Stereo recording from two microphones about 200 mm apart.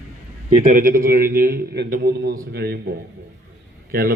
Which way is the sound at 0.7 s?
40° right (ahead or behind).